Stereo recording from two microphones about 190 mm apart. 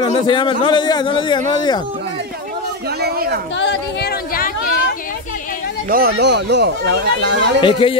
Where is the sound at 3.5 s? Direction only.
60° left (ahead or behind).